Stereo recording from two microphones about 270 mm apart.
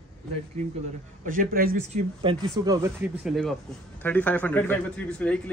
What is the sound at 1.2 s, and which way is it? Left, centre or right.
Speech, right.